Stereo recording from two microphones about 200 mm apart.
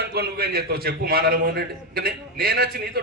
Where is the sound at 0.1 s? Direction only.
50° right (ahead or behind).